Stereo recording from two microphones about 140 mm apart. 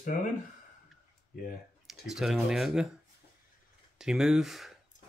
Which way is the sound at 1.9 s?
Centre (ahead or behind).